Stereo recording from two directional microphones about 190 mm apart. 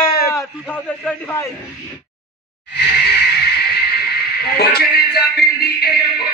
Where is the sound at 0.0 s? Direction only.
50° left (ahead or behind).